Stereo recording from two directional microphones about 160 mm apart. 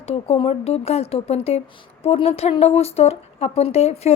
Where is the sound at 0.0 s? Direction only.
40° left (ahead or behind).